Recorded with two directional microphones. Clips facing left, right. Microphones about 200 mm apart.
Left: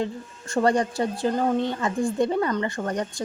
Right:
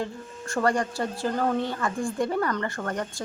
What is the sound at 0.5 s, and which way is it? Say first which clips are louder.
A woman's voice: left 3 dB; 20° left (ahead or behind).